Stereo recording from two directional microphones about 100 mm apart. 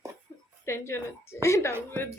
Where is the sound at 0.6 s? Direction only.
25° left (ahead or behind).